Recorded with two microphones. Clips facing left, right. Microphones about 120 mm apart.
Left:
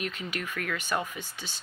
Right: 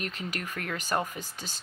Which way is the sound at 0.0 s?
40° right (ahead or behind).